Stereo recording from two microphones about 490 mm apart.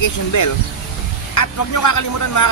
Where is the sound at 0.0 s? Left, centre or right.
Left.